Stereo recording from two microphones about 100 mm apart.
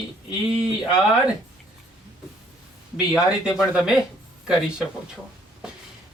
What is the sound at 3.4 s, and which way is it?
Speech, 5° right (ahead or behind).